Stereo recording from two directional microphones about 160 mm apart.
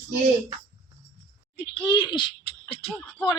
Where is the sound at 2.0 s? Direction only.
30° left (ahead or behind).